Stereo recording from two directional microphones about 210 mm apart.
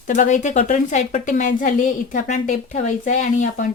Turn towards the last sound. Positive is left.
turn(degrees=35)  # may be behind; listen again after turning